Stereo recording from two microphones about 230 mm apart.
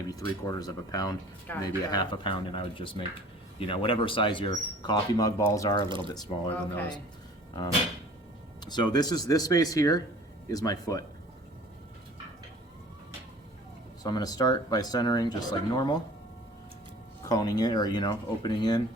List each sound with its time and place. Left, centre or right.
0.1 s speech: centre
8.6 s speech: centre
14.0 s speech: centre
17.2 s speech: centre